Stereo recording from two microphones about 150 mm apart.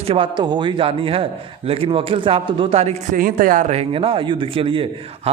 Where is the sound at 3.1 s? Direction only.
65° right (ahead or behind).